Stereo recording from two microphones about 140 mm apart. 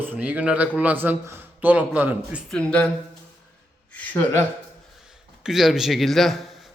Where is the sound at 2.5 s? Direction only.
10° left (ahead or behind).